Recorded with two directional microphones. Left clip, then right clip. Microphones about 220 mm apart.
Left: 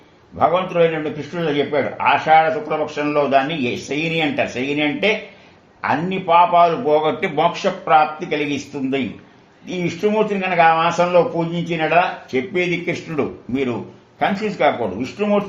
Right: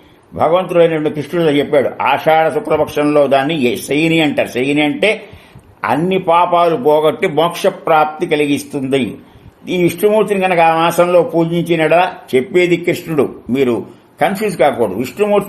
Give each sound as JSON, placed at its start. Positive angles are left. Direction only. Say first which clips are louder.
{"t": 0.3, "sound": "speech", "louder": "right 5 dB", "side_deg": -60}